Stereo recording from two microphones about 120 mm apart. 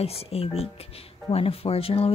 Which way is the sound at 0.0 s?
60° left (ahead or behind).